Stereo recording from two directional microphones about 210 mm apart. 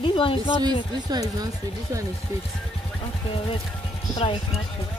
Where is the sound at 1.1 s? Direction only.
15° right (ahead or behind).